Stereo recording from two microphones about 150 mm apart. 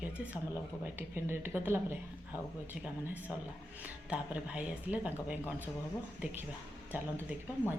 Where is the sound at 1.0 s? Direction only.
15° right (ahead or behind).